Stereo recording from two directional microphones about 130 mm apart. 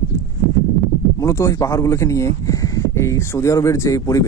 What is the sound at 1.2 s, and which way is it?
Speech, 25° left (ahead or behind).